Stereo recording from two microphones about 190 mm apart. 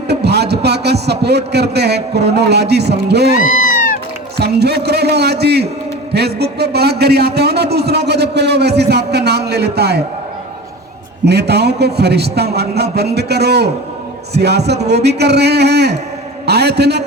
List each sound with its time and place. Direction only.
0.1 s a man's voice: 60° right (ahead or behind)
3.3 s a sound: 45° left (ahead or behind)
4.4 s a man's voice: 60° right (ahead or behind)
11.3 s a man's voice: 60° right (ahead or behind)